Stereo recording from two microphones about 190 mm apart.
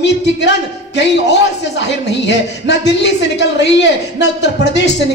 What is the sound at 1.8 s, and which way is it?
Speech, 65° left (ahead or behind).